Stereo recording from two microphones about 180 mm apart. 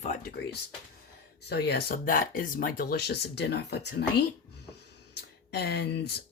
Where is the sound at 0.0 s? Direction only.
40° left (ahead or behind).